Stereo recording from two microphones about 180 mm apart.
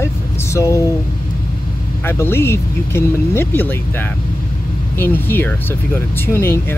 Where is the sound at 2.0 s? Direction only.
10° left (ahead or behind).